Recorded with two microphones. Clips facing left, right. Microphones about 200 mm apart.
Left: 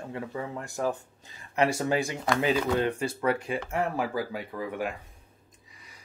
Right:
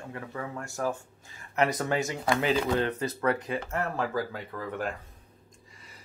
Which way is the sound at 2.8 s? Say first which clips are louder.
Left 1 dB; 10° left (ahead or behind).